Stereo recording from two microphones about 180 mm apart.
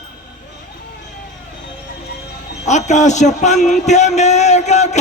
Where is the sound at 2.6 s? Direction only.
40° left (ahead or behind).